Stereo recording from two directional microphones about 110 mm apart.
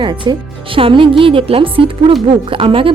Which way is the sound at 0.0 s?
45° right (ahead or behind).